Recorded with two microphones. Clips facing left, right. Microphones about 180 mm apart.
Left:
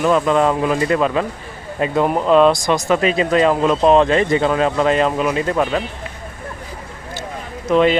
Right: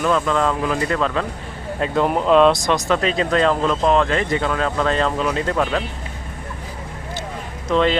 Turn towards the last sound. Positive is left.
turn(degrees=10)  # may be behind; listen again after turning